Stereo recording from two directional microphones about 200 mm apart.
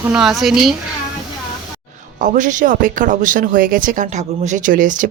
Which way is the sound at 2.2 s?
40° right (ahead or behind).